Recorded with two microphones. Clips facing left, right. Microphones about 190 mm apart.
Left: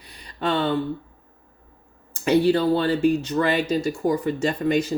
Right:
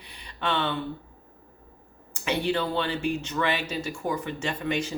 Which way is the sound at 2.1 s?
40° left (ahead or behind).